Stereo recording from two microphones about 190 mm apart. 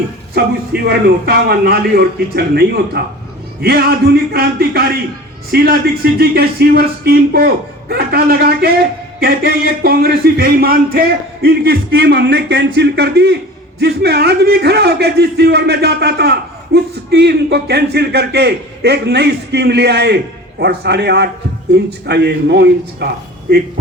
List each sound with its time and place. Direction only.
0.7 s speech: 55° right (ahead or behind)